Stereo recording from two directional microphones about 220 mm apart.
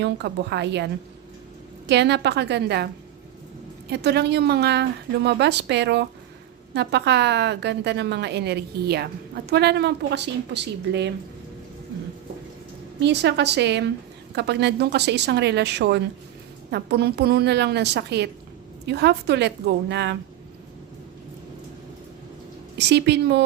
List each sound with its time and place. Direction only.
0.0 s a woman's voice: 50° right (ahead or behind)
1.9 s a woman's voice: 50° right (ahead or behind)
13.0 s a woman's voice: 50° right (ahead or behind)
22.8 s a woman's voice: 50° right (ahead or behind)